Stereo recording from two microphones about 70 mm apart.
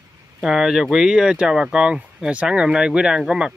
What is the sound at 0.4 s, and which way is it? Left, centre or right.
Speech, centre.